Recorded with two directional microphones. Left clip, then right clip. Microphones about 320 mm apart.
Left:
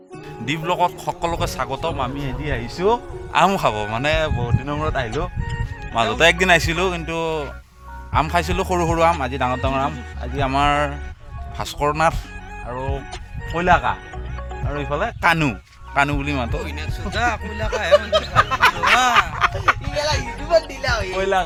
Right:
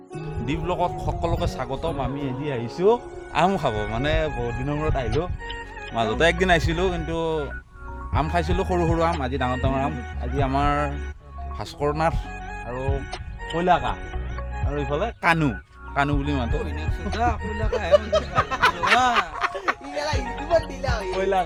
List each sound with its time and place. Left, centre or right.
0.4 s a man's voice: centre
16.6 s speech: centre
17.9 s speech: centre
19.1 s a sound: centre
20.5 s speech: centre